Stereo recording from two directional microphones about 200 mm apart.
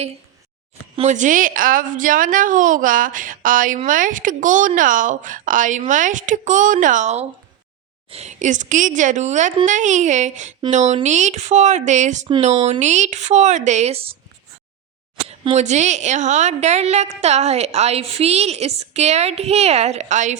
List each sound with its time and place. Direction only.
0.9 s a woman's voice: 35° right (ahead or behind)
15.3 s a woman's voice: 35° right (ahead or behind)